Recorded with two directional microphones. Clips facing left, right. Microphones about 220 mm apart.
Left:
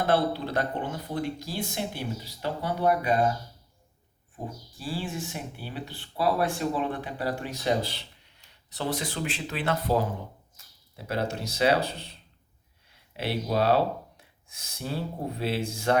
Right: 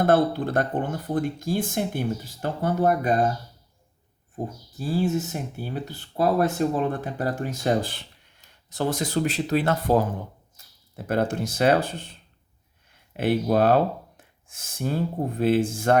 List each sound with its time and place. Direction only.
0.0 s speech: 50° right (ahead or behind)
4.7 s speech: 45° right (ahead or behind)
13.1 s speech: 50° right (ahead or behind)